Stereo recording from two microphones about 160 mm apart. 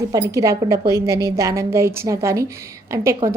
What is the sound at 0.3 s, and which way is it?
A woman's voice, 20° right (ahead or behind).